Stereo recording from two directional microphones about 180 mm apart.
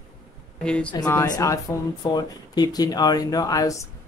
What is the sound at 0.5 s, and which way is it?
Speech, 5° left (ahead or behind).